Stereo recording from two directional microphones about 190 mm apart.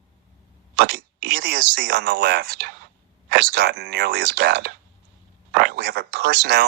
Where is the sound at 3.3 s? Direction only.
55° right (ahead or behind).